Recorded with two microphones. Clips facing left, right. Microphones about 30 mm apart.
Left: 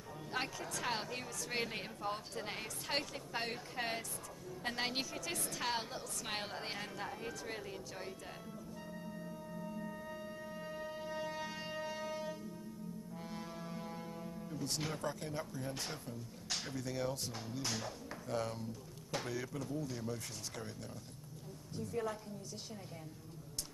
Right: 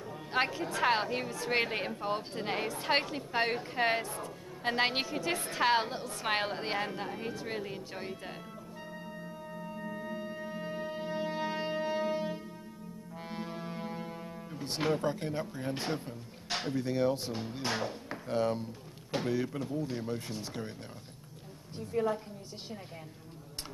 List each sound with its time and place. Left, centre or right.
0.3 s a woman's voice: right
9.2 s music: right
16.6 s a woman's voice: right
21.7 s a woman's voice: right